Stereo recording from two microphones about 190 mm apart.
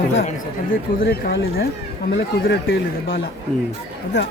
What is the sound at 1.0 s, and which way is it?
Speech, 55° left (ahead or behind).